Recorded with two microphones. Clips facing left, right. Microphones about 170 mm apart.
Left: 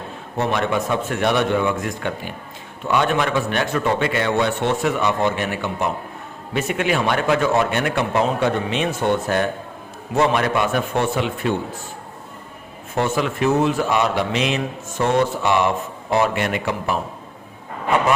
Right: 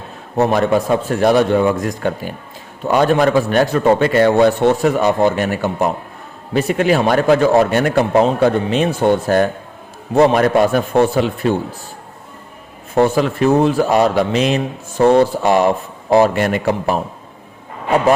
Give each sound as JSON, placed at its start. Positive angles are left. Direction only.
{"t": 0.3, "sound": "a man's voice", "side_deg": -40}
{"t": 13.0, "sound": "a man's voice", "side_deg": -35}